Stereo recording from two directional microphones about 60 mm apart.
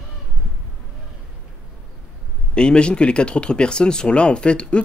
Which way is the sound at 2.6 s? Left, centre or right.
Centre.